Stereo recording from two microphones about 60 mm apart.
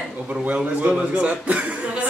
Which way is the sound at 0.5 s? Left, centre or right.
Right.